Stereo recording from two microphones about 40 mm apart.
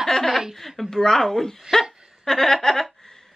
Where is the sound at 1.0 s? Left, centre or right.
Centre.